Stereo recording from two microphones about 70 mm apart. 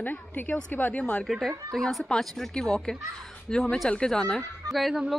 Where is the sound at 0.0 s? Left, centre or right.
Left.